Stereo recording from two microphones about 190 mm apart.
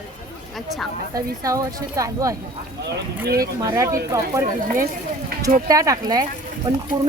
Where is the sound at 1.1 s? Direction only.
15° right (ahead or behind).